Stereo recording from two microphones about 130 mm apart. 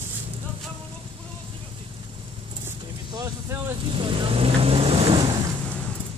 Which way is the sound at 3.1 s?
25° right (ahead or behind).